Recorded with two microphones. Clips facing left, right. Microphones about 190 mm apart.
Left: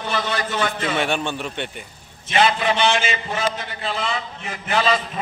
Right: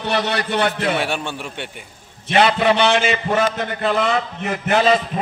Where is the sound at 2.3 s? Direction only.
60° right (ahead or behind).